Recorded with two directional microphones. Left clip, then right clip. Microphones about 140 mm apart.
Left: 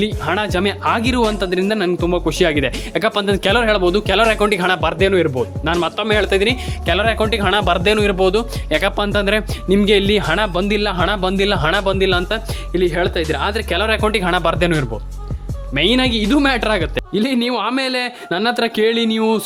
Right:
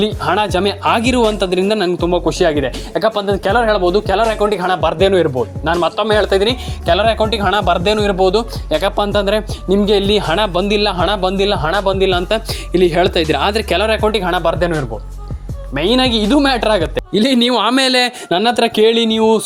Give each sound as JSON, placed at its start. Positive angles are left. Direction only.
{"t": 0.0, "sound": "a man's voice", "side_deg": -5}
{"t": 0.9, "sound": "a man's voice", "side_deg": -10}
{"t": 2.4, "sound": "speech", "side_deg": 15}
{"t": 4.8, "sound": "a man's voice", "side_deg": 0}
{"t": 12.3, "sound": "speech", "side_deg": -25}
{"t": 13.8, "sound": "a man's voice", "side_deg": 0}
{"t": 15.7, "sound": "a man's voice", "side_deg": 10}
{"t": 17.2, "sound": "speech", "side_deg": -30}
{"t": 18.3, "sound": "speech", "side_deg": -15}